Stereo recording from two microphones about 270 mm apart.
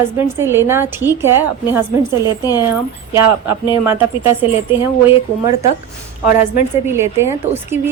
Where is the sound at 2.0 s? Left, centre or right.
Centre.